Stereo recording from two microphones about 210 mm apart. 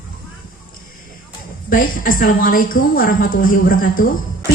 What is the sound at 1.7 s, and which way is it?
A woman's voice, 40° left (ahead or behind).